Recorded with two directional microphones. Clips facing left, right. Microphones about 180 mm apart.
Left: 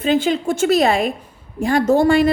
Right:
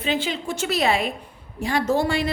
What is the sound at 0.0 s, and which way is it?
Speech, 50° left (ahead or behind).